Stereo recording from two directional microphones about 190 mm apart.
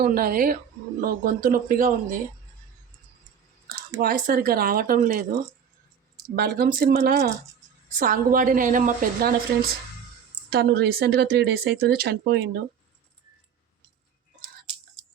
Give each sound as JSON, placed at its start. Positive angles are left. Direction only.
{"t": 0.0, "sound": "a woman's voice", "side_deg": -50}
{"t": 3.7, "sound": "a woman's voice", "side_deg": -50}
{"t": 6.3, "sound": "speech", "side_deg": -55}
{"t": 7.9, "sound": "a woman's voice", "side_deg": -45}